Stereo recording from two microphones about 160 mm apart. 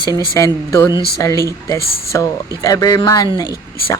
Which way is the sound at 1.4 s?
20° right (ahead or behind).